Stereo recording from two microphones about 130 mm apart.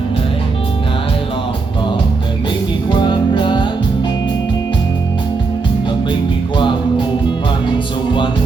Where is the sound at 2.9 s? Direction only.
35° left (ahead or behind).